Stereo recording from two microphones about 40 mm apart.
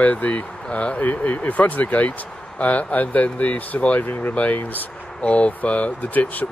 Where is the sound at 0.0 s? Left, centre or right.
Left.